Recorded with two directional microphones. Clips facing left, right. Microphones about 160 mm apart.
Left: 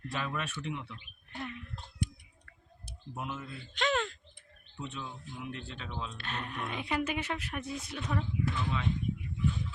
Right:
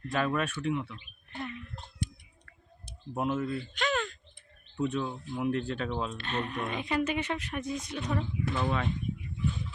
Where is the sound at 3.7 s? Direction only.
25° left (ahead or behind).